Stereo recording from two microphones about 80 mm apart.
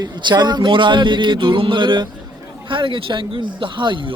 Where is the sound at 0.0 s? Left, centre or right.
Right.